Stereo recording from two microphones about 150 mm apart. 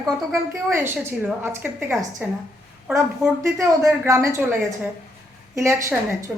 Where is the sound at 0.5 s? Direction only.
15° right (ahead or behind).